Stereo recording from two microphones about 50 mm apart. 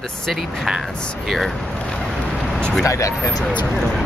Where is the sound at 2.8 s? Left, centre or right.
Left.